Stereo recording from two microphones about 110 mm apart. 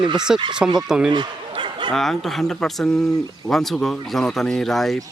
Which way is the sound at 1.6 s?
45° right (ahead or behind).